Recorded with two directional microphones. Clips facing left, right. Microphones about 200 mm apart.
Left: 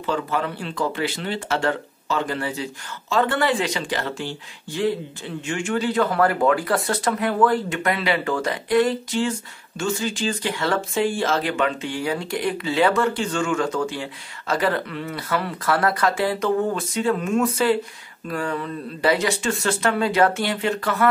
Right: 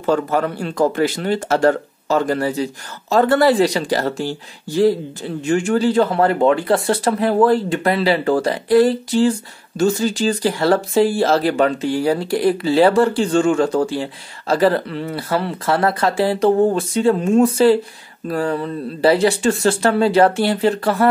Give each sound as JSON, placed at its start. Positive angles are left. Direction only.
{"t": 0.0, "sound": "speech", "side_deg": -45}